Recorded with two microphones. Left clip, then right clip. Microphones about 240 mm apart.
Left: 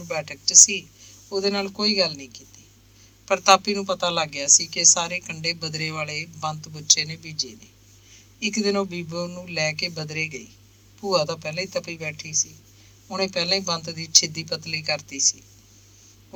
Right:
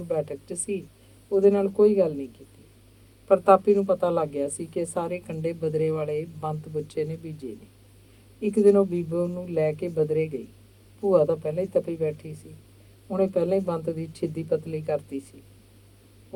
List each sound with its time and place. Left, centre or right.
0.1 s a woman's voice: left
3.2 s a woman's voice: left
8.4 s a woman's voice: left